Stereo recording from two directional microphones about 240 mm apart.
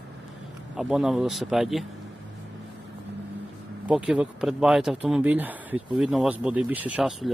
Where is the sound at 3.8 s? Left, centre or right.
Centre.